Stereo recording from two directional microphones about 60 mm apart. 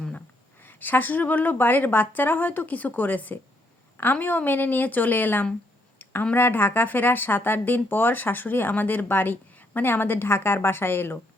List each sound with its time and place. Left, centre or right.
0.6 s speech: left